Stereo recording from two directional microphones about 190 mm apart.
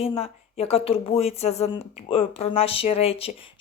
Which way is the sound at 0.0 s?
30° left (ahead or behind).